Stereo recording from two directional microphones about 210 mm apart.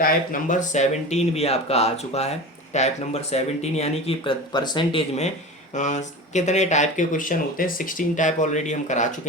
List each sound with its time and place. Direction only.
0.0 s speech: 35° left (ahead or behind)